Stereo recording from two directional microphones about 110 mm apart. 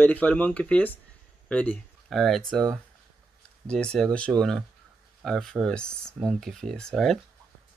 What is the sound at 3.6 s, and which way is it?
Speech, 10° left (ahead or behind).